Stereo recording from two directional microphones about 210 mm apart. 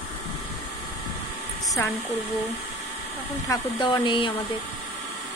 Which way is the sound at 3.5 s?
20° left (ahead or behind).